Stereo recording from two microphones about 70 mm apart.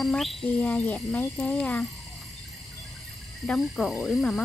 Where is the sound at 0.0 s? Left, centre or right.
Centre.